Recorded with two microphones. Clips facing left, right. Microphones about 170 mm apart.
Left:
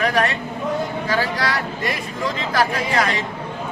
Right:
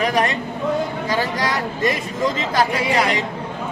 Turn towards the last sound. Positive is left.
turn(degrees=-15)  # may be behind; listen again after turning